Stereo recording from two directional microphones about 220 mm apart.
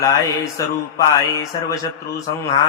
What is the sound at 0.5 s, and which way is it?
Mantra, 15° left (ahead or behind).